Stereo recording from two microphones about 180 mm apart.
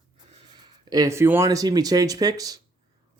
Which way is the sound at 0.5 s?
20° right (ahead or behind).